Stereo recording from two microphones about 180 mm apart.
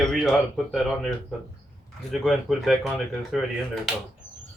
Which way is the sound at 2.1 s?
Centre (ahead or behind).